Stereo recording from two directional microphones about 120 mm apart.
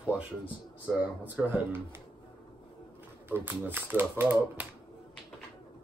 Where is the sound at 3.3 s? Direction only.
15° right (ahead or behind).